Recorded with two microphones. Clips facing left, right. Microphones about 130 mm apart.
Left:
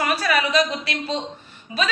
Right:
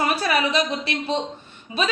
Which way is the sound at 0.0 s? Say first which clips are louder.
Even; 25° right (ahead or behind).